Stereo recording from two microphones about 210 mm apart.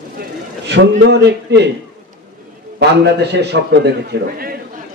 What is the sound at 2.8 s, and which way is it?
A man's voice, 55° right (ahead or behind).